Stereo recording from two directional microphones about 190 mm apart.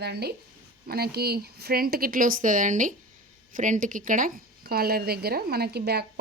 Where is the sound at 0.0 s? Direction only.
60° right (ahead or behind).